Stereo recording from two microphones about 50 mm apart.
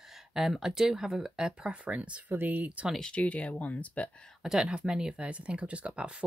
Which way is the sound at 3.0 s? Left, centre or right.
Left.